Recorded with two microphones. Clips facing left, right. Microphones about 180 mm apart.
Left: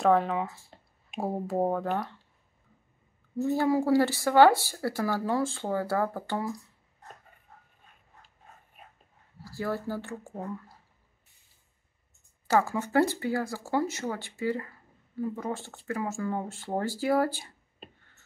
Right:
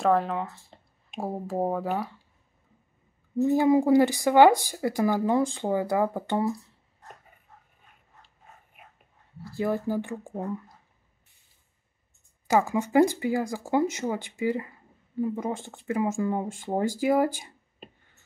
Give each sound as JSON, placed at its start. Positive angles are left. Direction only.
{"t": 0.0, "sound": "speech", "side_deg": 0}
{"t": 3.4, "sound": "speech", "side_deg": -15}
{"t": 9.4, "sound": "speech", "side_deg": -20}
{"t": 12.4, "sound": "speech", "side_deg": -15}